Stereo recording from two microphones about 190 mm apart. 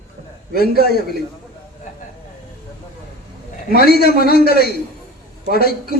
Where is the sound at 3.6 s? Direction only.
55° left (ahead or behind).